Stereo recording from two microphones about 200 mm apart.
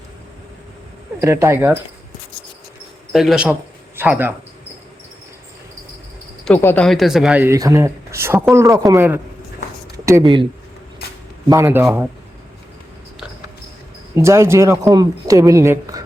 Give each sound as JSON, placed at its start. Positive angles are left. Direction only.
{"t": 1.2, "sound": "speech", "side_deg": -15}
{"t": 3.1, "sound": "a man's voice", "side_deg": 0}
{"t": 6.4, "sound": "speech", "side_deg": 10}
{"t": 11.4, "sound": "speech", "side_deg": -15}
{"t": 14.2, "sound": "speech", "side_deg": -15}